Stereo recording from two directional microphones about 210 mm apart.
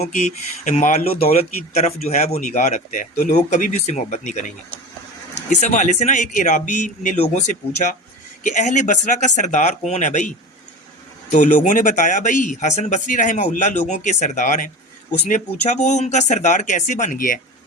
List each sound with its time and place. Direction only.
0.0 s speech: 35° left (ahead or behind)
5.5 s speech: 35° left (ahead or behind)